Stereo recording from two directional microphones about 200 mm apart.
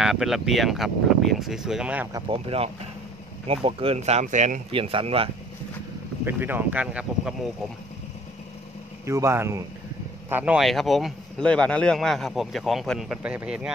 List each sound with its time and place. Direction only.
0.0 s a man's voice: centre (ahead or behind)
2.1 s speech: 25° right (ahead or behind)
6.2 s speech: 10° right (ahead or behind)
9.0 s a man's voice: 15° right (ahead or behind)